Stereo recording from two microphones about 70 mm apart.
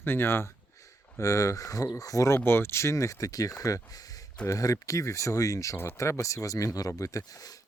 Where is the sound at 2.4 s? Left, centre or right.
Left.